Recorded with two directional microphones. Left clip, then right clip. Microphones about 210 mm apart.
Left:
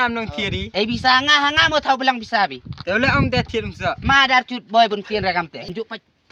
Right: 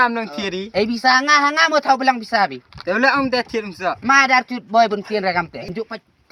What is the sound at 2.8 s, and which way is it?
Speech, 35° left (ahead or behind).